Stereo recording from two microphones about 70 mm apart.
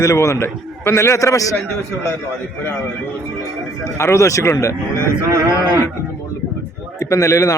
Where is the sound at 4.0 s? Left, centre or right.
Left.